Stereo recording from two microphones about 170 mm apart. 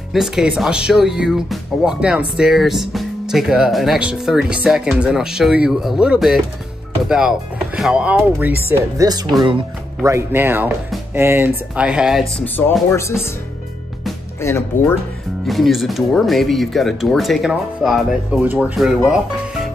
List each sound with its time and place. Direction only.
0.1 s speech: centre (ahead or behind)
8.6 s speech: 20° right (ahead or behind)
10.0 s speech: 15° right (ahead or behind)
12.9 s speech: 15° left (ahead or behind)
14.4 s speech: 15° left (ahead or behind)
15.4 s speech: centre (ahead or behind)